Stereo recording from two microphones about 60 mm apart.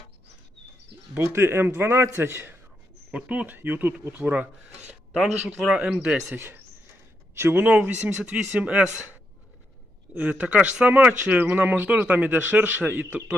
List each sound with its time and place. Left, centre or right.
1.2 s a man's voice: right
3.1 s a man's voice: centre
3.5 s a man's voice: right
5.5 s speech: centre
6.3 s a man's voice: right
7.7 s a man's voice: right
10.2 s a man's voice: right